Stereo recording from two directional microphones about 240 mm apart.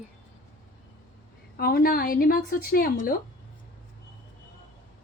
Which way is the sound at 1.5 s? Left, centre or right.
Left.